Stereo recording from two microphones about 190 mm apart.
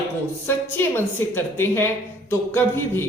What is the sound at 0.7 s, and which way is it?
A woman's voice, 10° left (ahead or behind).